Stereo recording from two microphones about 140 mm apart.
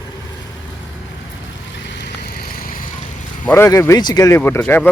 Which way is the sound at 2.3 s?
90° left.